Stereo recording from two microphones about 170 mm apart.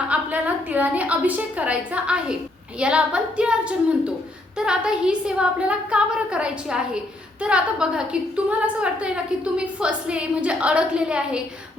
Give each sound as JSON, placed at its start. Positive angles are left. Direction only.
{"t": 0.1, "sound": "a woman's voice", "side_deg": -10}